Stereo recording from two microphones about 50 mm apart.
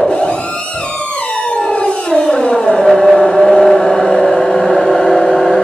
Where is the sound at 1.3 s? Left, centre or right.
Left.